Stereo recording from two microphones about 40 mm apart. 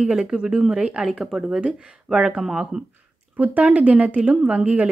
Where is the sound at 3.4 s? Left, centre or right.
Right.